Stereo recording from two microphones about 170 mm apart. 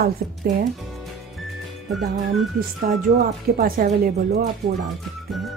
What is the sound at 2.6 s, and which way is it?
Speech, 55° right (ahead or behind).